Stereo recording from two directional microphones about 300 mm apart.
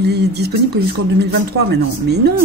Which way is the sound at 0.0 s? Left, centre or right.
Right.